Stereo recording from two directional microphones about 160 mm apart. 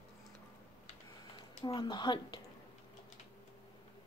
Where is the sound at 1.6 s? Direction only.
30° left (ahead or behind).